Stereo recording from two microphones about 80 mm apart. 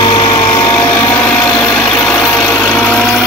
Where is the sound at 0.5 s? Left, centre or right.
Left.